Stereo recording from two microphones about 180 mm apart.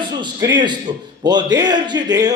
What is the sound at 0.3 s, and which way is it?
A man's voice, 20° right (ahead or behind).